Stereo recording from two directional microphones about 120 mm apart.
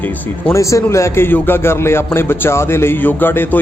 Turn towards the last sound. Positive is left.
turn(degrees=15)  # may be behind; listen again after turning